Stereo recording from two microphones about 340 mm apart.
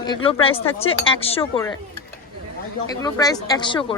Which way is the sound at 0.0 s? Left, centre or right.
Centre.